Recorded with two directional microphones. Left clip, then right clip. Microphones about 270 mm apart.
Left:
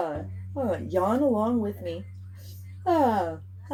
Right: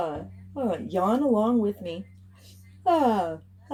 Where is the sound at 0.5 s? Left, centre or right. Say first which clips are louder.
Left 1 dB; right.